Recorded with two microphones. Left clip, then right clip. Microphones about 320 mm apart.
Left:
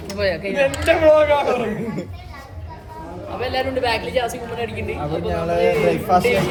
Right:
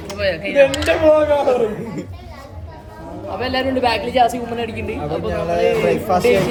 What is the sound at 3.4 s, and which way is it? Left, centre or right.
A woman's voice, centre.